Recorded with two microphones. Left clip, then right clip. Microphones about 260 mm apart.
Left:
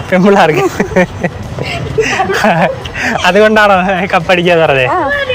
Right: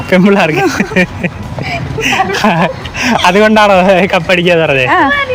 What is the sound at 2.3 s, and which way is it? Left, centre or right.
Speech, centre.